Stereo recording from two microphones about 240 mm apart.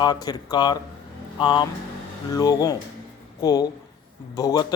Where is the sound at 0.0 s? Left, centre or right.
Centre.